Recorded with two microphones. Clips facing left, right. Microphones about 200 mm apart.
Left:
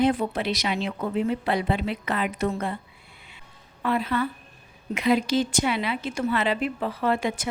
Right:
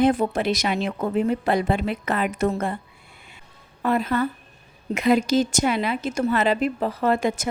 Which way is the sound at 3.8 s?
45° right (ahead or behind).